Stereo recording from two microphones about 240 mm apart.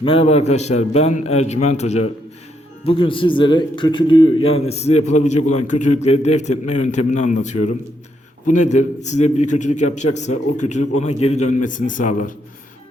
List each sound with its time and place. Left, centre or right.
0.0 s a man's voice: left